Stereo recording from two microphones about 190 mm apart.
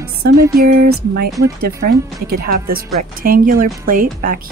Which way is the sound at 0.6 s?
55° right (ahead or behind).